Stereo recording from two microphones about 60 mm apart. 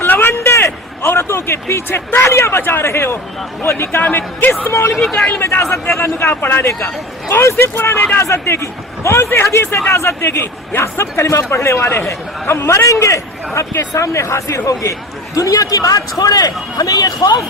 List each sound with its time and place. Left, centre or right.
0.0 s a sound: left
2.2 s a man's voice: left
4.1 s speech: left
4.7 s a man's voice: left
5.7 s a man's voice: left
6.7 s a man's voice: left
15.4 s a man's voice: left